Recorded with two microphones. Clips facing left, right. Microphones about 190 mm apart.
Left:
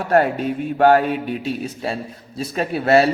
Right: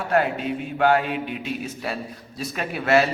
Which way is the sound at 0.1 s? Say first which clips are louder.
Left 5 dB; 45° left (ahead or behind).